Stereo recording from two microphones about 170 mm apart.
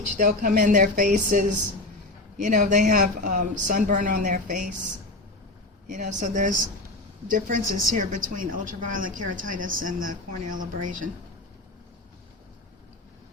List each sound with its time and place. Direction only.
0.2 s a woman's voice: 50° right (ahead or behind)
5.9 s a woman's voice: 45° right (ahead or behind)